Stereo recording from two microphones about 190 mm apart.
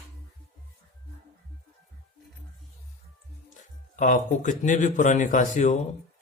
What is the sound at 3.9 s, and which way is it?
Speech, 40° left (ahead or behind).